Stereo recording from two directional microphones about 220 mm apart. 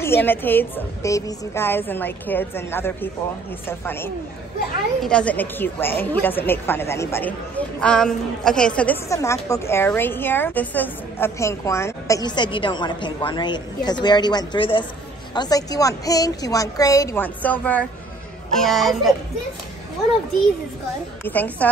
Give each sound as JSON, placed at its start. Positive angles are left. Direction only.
{"t": 0.0, "sound": "a woman's voice", "side_deg": 10}
{"t": 21.2, "sound": "a woman's voice", "side_deg": 10}